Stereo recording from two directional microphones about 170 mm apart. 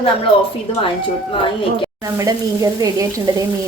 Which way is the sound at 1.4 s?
30° left (ahead or behind).